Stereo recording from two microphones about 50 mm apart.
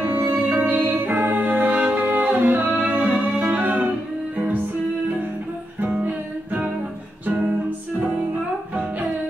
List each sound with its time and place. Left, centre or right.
0.0 s music: right
5.8 s music: right